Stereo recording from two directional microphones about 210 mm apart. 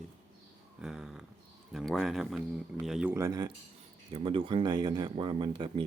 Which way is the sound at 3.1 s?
15° right (ahead or behind).